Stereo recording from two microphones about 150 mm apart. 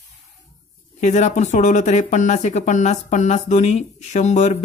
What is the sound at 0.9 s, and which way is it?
Speech, 50° left (ahead or behind).